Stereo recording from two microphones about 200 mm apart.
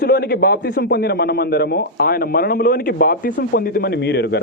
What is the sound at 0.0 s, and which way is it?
A man's voice, 50° left (ahead or behind).